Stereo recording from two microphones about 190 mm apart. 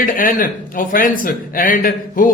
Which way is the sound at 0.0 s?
45° left (ahead or behind).